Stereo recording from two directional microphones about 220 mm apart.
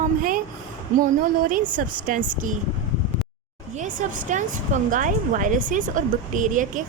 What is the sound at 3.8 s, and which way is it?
Speech, 35° right (ahead or behind).